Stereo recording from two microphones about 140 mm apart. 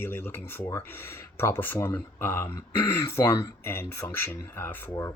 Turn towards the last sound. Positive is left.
turn(degrees=20)  # may be behind; listen again after turning